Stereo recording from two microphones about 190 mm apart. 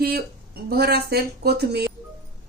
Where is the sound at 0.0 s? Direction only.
55° right (ahead or behind).